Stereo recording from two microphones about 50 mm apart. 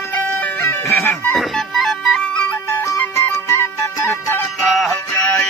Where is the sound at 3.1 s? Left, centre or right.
Left.